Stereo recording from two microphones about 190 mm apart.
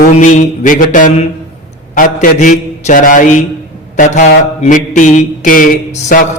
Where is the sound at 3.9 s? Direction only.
45° left (ahead or behind).